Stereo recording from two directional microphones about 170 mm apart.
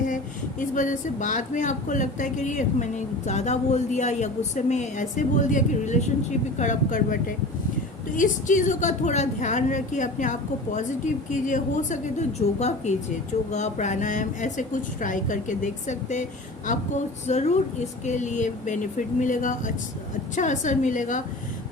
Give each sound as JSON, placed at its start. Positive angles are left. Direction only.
{"t": 0.6, "sound": "speech", "side_deg": 50}